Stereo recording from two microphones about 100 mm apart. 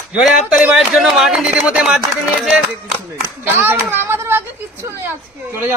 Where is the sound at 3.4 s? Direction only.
20° right (ahead or behind).